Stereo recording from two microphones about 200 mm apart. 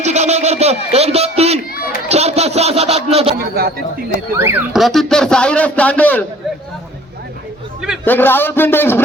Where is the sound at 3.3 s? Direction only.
50° right (ahead or behind).